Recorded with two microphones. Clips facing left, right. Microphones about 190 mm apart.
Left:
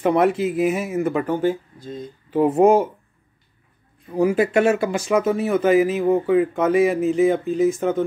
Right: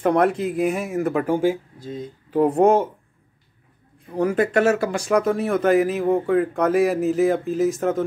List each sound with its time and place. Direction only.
0.0 s speech: 5° left (ahead or behind)
2.4 s speech: 5° left (ahead or behind)
4.1 s speech: 10° left (ahead or behind)